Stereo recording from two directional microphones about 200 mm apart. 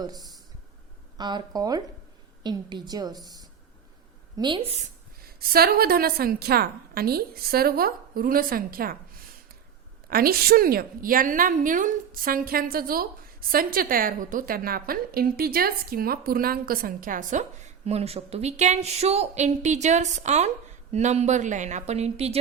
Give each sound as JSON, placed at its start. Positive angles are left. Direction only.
{"t": 0.0, "sound": "a woman's voice", "side_deg": -20}
{"t": 5.4, "sound": "a woman's voice", "side_deg": -50}
{"t": 10.1, "sound": "a woman's voice", "side_deg": -50}